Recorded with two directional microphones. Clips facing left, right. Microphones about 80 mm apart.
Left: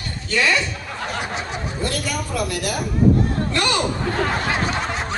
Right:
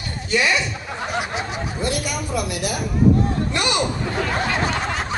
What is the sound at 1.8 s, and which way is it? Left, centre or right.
A woman's voice, centre.